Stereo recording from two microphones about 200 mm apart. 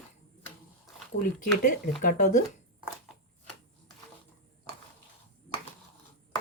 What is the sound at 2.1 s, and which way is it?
Speech, 40° left (ahead or behind).